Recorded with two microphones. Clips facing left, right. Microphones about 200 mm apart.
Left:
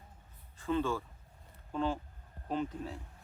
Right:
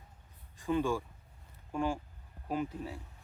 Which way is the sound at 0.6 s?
15° right (ahead or behind).